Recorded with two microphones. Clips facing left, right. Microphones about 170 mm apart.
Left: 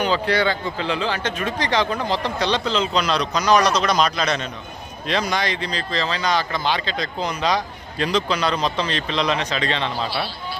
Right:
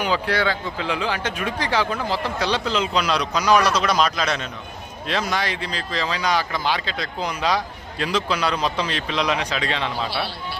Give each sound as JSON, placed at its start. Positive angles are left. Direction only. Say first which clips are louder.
{"t": 0.0, "sound": "speech", "louder": "left 2 dB", "side_deg": -5}